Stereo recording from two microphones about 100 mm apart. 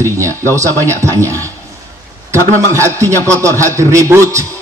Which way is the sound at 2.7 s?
30° right (ahead or behind).